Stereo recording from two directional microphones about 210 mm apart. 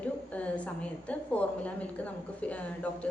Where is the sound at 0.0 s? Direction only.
5° left (ahead or behind).